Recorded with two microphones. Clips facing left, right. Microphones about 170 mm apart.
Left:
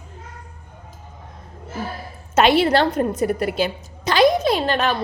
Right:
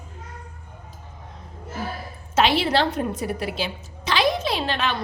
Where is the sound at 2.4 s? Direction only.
50° left (ahead or behind).